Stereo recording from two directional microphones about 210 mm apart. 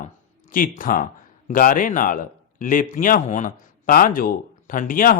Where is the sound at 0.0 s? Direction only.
40° left (ahead or behind).